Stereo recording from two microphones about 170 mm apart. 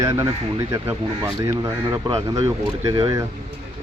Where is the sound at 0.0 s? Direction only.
20° right (ahead or behind).